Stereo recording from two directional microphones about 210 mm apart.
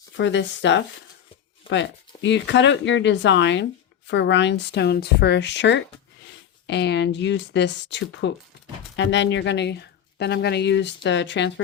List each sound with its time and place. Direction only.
0.2 s speech: 60° left (ahead or behind)